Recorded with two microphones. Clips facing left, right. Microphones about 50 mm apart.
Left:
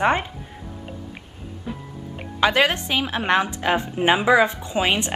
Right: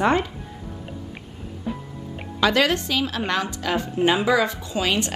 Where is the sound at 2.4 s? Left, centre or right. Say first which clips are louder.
Left 1 dB; left.